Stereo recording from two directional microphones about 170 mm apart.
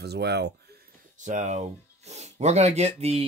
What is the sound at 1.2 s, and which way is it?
Speech, 45° right (ahead or behind).